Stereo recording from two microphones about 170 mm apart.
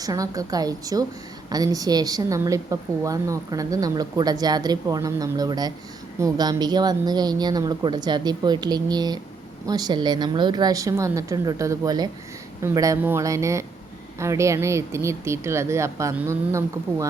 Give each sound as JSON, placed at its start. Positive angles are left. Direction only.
{"t": 0.0, "sound": "a woman's voice", "side_deg": -20}